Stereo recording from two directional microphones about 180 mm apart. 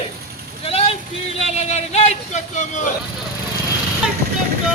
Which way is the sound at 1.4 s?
35° left (ahead or behind).